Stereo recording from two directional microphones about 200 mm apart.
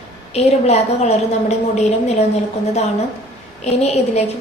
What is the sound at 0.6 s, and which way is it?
A woman's voice, 30° left (ahead or behind).